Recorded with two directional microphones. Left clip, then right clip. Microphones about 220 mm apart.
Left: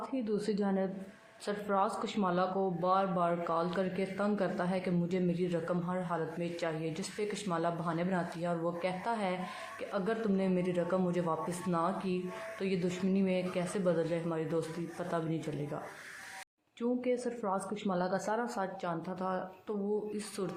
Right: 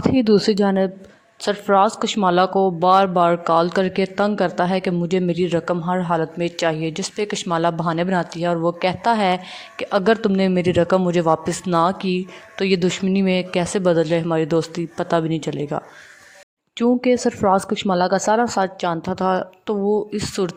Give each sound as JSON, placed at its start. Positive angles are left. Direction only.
{"t": 0.1, "sound": "speech", "side_deg": -50}